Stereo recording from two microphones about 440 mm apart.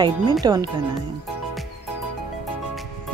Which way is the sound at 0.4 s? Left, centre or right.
Centre.